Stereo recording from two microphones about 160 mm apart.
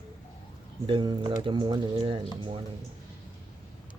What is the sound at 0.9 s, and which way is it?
Speech, 30° right (ahead or behind).